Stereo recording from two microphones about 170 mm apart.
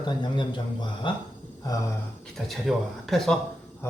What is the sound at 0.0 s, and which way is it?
A man's voice, 25° left (ahead or behind).